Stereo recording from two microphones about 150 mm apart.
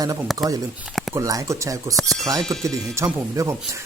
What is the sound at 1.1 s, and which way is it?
Speech, 20° right (ahead or behind).